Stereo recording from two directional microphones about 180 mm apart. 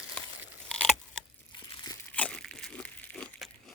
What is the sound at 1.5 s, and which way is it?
Crumpling, 20° left (ahead or behind).